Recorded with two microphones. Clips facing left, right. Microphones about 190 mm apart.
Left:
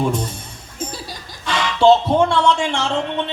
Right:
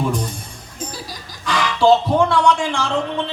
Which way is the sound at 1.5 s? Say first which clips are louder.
Left 1 dB; 25° left (ahead or behind).